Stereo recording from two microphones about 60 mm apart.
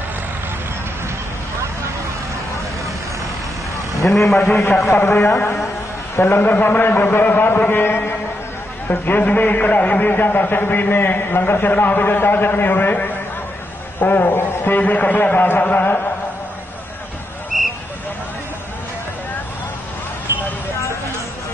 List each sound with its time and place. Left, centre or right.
4.0 s a man's voice: centre
4.9 s a man's voice: left
6.6 s a man's voice: left
9.1 s a man's voice: left
14.4 s a man's voice: left
15.6 s a sound: left